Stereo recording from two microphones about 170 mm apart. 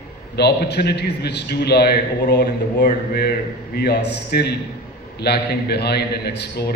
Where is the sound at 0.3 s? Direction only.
75° left (ahead or behind).